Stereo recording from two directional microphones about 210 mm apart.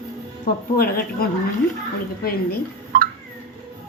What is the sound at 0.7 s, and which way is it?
Speech, 45° left (ahead or behind).